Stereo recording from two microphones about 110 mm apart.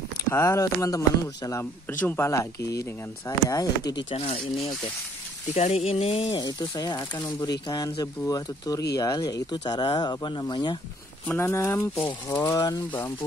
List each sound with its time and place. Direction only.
0.2 s speech: 25° left (ahead or behind)
4.1 s speech: 65° left (ahead or behind)
5.5 s speech: 75° left (ahead or behind)
6.3 s speech: 40° left (ahead or behind)
11.2 s speech: 25° left (ahead or behind)